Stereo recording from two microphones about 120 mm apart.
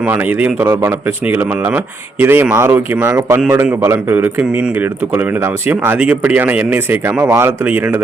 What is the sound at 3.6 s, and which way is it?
Speech, 15° right (ahead or behind).